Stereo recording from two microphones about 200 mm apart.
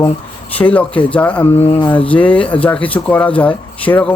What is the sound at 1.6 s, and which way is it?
Speech, 30° left (ahead or behind).